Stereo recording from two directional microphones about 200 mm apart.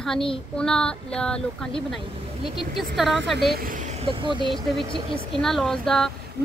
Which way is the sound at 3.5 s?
45° right (ahead or behind).